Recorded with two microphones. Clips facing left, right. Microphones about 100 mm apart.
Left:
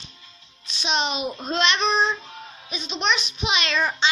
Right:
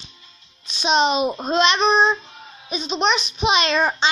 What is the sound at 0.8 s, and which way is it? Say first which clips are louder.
Speech: right 7 dB; 20° right (ahead or behind).